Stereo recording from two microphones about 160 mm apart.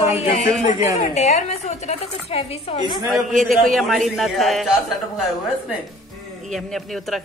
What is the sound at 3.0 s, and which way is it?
A man's voice, centre (ahead or behind).